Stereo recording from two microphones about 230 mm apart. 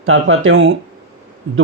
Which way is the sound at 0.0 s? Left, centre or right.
Right.